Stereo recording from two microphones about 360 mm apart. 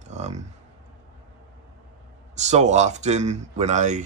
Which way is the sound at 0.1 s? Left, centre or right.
Centre.